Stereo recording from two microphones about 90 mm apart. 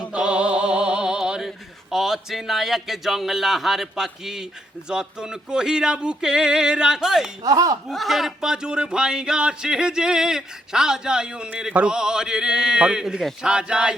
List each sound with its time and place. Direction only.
0.1 s a sound: 10° right (ahead or behind)
4.9 s speech: 10° right (ahead or behind)
7.4 s speech: 40° right (ahead or behind)
7.9 s speech: centre (ahead or behind)